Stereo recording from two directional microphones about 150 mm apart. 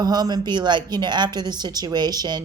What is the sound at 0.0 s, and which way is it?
A woman's voice, 25° right (ahead or behind).